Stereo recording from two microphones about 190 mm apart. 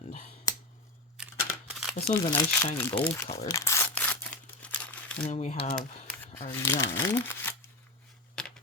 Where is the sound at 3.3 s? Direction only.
15° left (ahead or behind).